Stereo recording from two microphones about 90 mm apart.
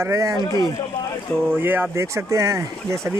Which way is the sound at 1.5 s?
25° right (ahead or behind).